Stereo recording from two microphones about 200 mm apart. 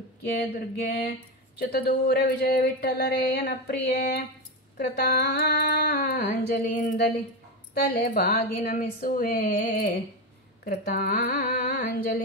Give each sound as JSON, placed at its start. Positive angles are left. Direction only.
{"t": 0.4, "sound": "speech", "side_deg": 55}
{"t": 6.2, "sound": "a sound", "side_deg": 40}
{"t": 7.7, "sound": "speech", "side_deg": 55}